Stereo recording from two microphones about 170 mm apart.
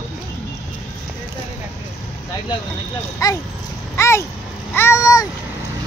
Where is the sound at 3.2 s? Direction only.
20° left (ahead or behind).